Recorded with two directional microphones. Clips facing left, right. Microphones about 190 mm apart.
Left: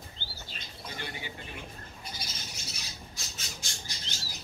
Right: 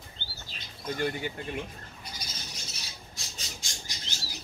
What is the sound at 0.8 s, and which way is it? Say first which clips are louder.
Speech: right 11 dB; 50° right (ahead or behind).